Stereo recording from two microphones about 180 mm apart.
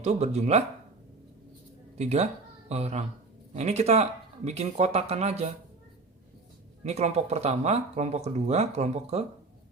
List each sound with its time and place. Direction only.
0.0 s speech: 40° right (ahead or behind)
2.0 s speech: 35° right (ahead or behind)
6.8 s speech: 40° right (ahead or behind)